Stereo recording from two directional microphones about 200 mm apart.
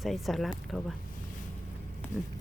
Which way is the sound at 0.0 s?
Centre (ahead or behind).